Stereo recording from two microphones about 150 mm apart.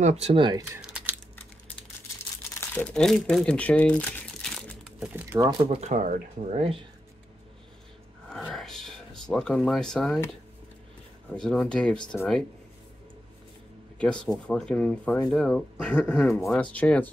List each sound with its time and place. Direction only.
0.0 s speech: 45° right (ahead or behind)
0.7 s typing: 10° right (ahead or behind)
2.7 s speech: 10° left (ahead or behind)
5.1 s speech: 15° right (ahead or behind)
5.7 s speech: 50° right (ahead or behind)
8.3 s speech: centre (ahead or behind)
11.3 s speech: 5° left (ahead or behind)
13.9 s speech: 5° left (ahead or behind)